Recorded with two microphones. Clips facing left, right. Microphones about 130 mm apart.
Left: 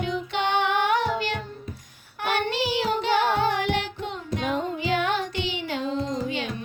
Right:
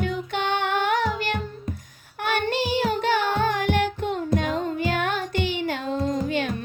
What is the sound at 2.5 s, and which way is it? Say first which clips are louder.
Child singing: right 2 dB; 50° right (ahead or behind).